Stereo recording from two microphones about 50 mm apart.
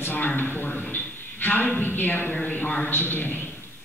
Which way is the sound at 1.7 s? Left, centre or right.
Left.